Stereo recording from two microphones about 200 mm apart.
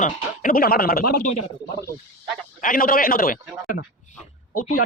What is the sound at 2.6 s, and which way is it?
Speech, 45° left (ahead or behind).